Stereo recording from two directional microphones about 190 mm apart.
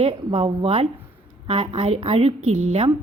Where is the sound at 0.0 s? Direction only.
30° right (ahead or behind).